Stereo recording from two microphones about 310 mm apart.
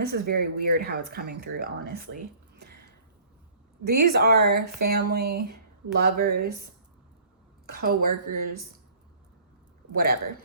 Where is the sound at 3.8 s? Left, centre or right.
Right.